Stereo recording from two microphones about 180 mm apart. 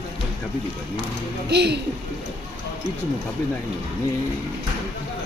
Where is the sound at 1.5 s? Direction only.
65° right (ahead or behind).